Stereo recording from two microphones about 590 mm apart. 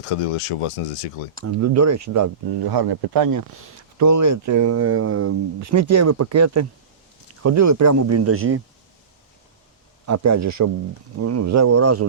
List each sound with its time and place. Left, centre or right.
0.0 s speech: left
1.4 s speech: right
10.1 s speech: right